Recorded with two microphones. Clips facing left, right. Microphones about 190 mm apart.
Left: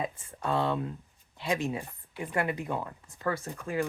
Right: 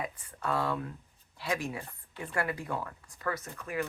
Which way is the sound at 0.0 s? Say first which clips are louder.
Left 3 dB; 25° left (ahead or behind).